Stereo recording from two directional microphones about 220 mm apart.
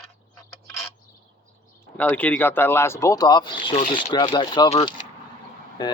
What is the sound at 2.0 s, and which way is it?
Speech, 5° left (ahead or behind).